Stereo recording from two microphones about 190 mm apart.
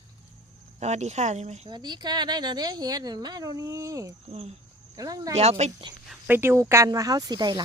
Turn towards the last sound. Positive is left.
turn(degrees=-20)  # may be behind; listen again after turning